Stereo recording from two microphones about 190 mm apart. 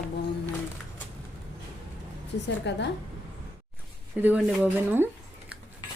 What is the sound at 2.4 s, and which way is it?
Speech, 65° left (ahead or behind).